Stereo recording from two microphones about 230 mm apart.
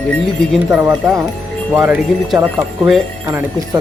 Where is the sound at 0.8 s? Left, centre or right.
Centre.